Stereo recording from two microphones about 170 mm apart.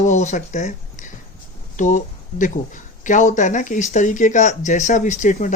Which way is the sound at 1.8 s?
45° left (ahead or behind).